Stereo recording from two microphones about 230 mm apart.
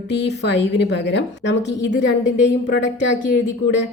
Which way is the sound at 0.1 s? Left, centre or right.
Left.